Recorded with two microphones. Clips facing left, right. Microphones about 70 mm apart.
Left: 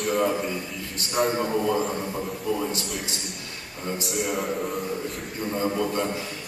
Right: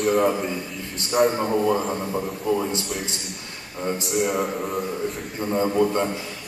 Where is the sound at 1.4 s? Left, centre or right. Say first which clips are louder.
Right 3 dB; centre.